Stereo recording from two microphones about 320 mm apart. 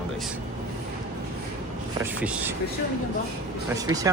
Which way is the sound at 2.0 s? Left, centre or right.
Centre.